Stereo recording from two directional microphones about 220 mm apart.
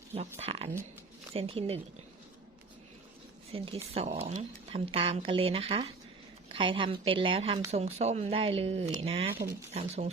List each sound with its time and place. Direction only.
0.1 s speech: 30° right (ahead or behind)
3.5 s speech: 25° right (ahead or behind)